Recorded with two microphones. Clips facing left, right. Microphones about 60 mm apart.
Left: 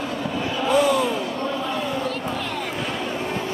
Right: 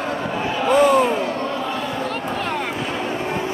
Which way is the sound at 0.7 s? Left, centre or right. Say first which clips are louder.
Right 4 dB; right.